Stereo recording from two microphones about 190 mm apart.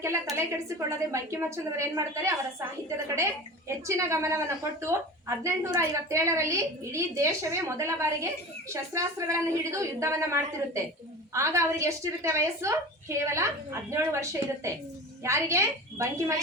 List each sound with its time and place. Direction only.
0.0 s a woman's voice: 15° right (ahead or behind)
3.8 s a woman's voice: 15° right (ahead or behind)